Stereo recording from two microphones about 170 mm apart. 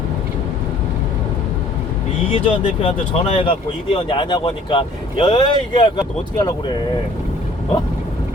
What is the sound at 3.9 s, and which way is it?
Speech, 30° left (ahead or behind).